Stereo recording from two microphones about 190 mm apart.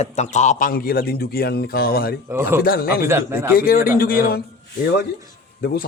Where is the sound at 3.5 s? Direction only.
50° left (ahead or behind).